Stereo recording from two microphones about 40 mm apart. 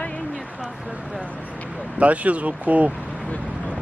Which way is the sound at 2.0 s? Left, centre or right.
Right.